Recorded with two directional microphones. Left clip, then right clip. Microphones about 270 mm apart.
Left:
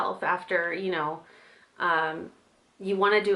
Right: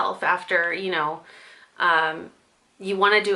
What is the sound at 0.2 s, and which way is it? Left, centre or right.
Speech, centre.